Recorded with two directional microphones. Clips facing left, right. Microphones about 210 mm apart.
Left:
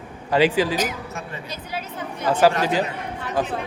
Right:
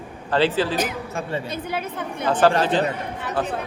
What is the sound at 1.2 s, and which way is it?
Speech, 30° right (ahead or behind).